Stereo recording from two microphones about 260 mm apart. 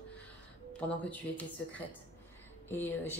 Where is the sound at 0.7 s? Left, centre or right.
Centre.